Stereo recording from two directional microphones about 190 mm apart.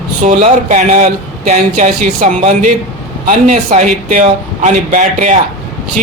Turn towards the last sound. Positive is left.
turn(degrees=-40)  # may be behind; listen again after turning